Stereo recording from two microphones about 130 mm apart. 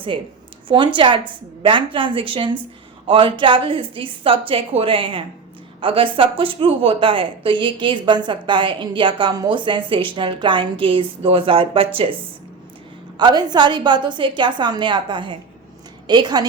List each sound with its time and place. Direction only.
0.1 s speech: 40° right (ahead or behind)
13.1 s speech: 35° right (ahead or behind)